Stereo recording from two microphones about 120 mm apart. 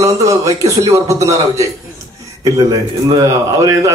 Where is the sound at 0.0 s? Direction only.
25° right (ahead or behind).